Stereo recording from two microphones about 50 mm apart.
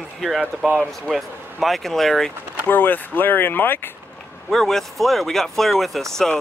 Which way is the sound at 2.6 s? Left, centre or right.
Left.